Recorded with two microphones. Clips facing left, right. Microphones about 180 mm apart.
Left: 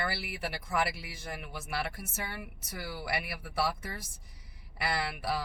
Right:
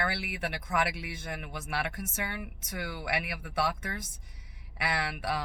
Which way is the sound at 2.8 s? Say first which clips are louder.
Right 2 dB; 65° right (ahead or behind).